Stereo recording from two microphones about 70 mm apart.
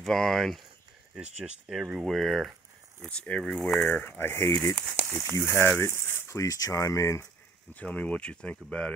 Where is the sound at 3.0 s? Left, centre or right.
Centre; by 7.2 s left.